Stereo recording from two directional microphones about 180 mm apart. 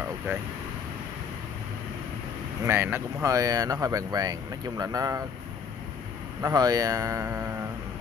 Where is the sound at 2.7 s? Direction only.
10° right (ahead or behind).